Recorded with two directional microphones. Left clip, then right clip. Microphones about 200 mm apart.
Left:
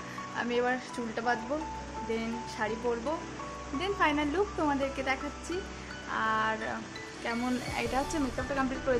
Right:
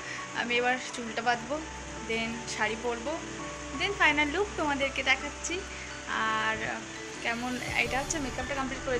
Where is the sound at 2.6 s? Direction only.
20° left (ahead or behind).